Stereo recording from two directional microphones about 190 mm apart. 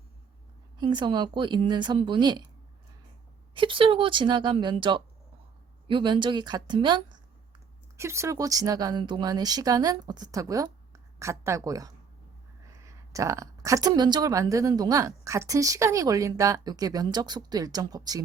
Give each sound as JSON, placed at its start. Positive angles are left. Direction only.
{"t": 0.8, "sound": "a woman's voice", "side_deg": -25}
{"t": 3.5, "sound": "a woman's voice", "side_deg": -25}